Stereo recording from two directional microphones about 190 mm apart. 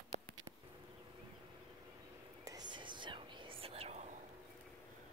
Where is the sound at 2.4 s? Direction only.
20° right (ahead or behind).